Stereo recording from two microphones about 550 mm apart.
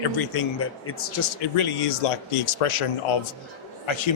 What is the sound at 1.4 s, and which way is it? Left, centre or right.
Speech, left.